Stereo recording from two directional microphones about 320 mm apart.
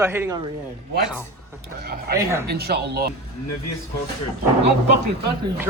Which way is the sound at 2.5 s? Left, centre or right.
Right.